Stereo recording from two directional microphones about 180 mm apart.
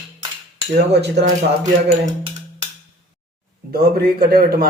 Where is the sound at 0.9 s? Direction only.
70° right (ahead or behind).